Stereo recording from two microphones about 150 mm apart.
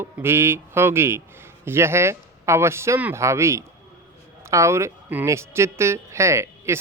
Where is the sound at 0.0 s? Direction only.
15° right (ahead or behind).